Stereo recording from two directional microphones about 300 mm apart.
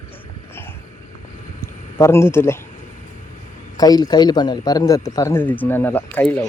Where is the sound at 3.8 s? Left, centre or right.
Centre.